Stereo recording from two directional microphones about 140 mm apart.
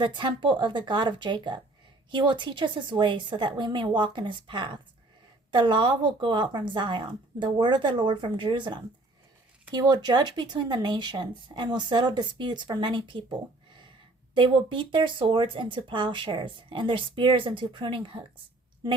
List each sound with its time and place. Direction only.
0.0 s speech: 35° right (ahead or behind)
14.3 s speech: 35° right (ahead or behind)